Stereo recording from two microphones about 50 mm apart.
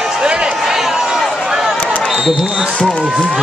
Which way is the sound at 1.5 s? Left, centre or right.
Centre.